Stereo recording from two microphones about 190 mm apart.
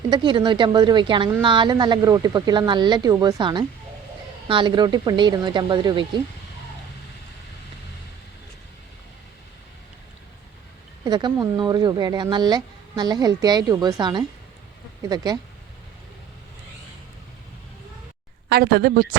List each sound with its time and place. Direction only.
0.1 s speech: 25° right (ahead or behind)
11.0 s speech: 20° right (ahead or behind)
18.4 s speech: 55° right (ahead or behind)